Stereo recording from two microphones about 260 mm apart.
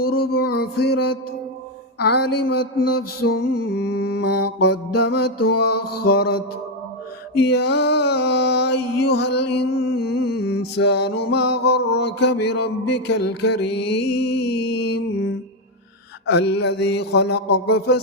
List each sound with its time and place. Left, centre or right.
0.0 s a sound: left
2.0 s music: left
7.5 s music: left